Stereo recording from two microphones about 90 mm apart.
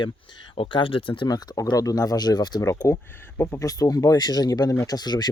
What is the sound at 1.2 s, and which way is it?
Speech, 45° left (ahead or behind).